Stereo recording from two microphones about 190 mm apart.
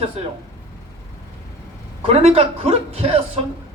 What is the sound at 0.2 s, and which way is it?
Speech, 35° right (ahead or behind).